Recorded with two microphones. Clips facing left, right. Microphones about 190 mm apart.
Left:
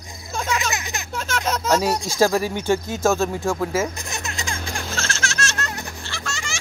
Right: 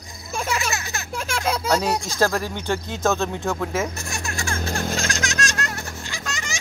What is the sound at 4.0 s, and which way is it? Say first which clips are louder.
Music: right 1 dB; 20° left (ahead or behind).